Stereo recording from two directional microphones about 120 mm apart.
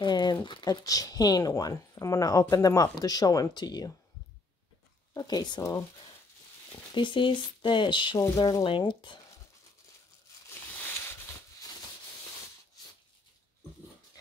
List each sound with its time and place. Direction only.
0.0 s speech: 40° left (ahead or behind)
5.1 s speech: 35° left (ahead or behind)
6.9 s speech: 45° left (ahead or behind)
10.5 s a sound: 20° left (ahead or behind)